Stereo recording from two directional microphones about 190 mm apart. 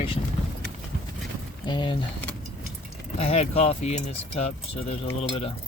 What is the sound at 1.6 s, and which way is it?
Speech, 25° left (ahead or behind).